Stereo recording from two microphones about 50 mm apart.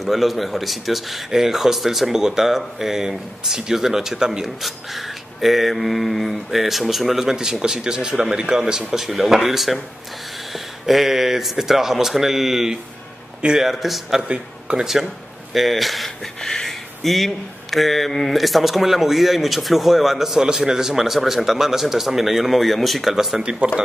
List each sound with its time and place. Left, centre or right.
0.0 s speech: centre
14.2 s speech: right
15.5 s speech: centre
23.1 s speech: centre